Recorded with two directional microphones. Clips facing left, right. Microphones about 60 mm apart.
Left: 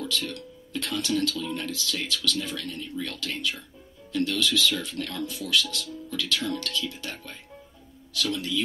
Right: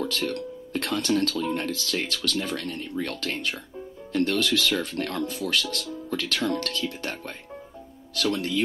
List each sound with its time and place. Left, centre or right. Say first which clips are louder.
0.0 s speech: right 4 dB; right